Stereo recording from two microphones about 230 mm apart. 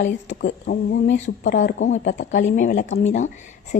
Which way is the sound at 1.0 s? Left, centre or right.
Left.